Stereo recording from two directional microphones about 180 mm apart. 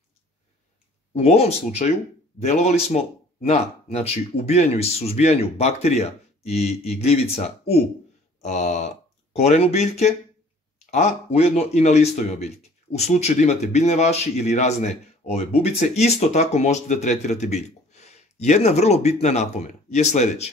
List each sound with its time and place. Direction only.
1.1 s speech: 35° left (ahead or behind)
8.4 s a sound: 40° left (ahead or behind)
9.3 s speech: 35° left (ahead or behind)